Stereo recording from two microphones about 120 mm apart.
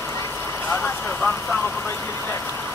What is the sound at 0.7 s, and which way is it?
Vehicle, 10° left (ahead or behind).